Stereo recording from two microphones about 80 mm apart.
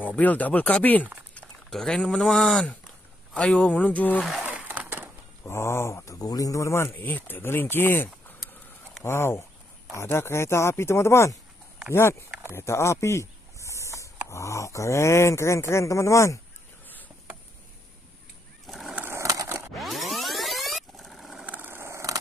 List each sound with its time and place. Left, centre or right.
0.0 s speech: left
4.5 s a sound: centre
5.4 s speech: left
18.7 s skateboard: centre
19.2 s a sound: right
19.8 s music: centre
21.5 s vehicle: right